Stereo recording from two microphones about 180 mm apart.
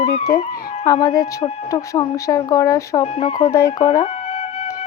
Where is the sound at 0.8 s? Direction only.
20° left (ahead or behind).